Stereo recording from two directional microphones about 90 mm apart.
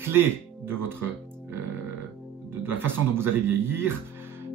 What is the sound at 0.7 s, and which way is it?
Speech, 25° right (ahead or behind).